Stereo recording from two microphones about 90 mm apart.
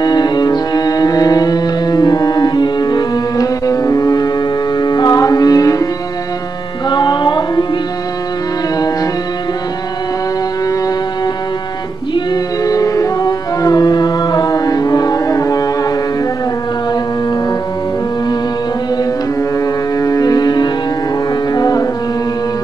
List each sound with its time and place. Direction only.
0.0 s music: 50° left (ahead or behind)
6.9 s music: 55° left (ahead or behind)
8.7 s music: 45° left (ahead or behind)
12.6 s music: 40° left (ahead or behind)
20.0 s music: 40° left (ahead or behind)